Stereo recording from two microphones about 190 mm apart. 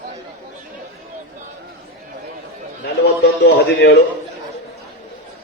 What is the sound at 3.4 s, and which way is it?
Speech, 65° left (ahead or behind).